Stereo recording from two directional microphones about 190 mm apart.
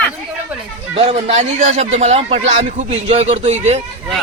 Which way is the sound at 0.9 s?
30° right (ahead or behind).